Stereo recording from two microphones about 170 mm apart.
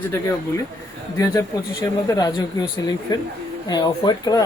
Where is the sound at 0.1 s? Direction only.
15° left (ahead or behind).